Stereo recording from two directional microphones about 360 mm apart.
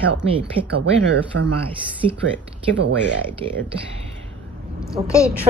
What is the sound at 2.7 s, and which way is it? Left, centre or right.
Speech, right.